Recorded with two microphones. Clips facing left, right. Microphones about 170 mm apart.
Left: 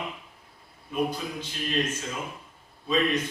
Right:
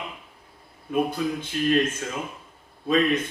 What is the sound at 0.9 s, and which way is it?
A man's voice, 55° right (ahead or behind).